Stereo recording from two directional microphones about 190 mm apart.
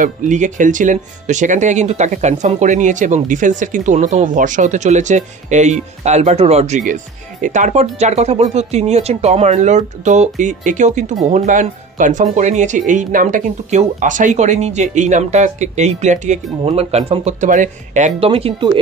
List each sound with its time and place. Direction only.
0.0 s speech: 40° right (ahead or behind)